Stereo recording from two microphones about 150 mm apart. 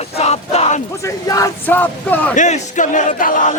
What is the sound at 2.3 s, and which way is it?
Speech, 55° left (ahead or behind).